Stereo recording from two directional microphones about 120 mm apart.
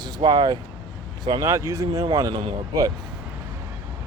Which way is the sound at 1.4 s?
25° right (ahead or behind).